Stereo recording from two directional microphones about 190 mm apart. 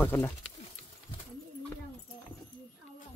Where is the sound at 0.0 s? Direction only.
10° left (ahead or behind).